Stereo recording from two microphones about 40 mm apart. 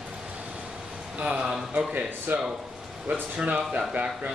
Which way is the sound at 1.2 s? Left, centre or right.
Right.